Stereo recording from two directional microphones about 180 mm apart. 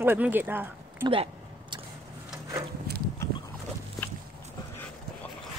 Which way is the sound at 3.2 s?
15° left (ahead or behind).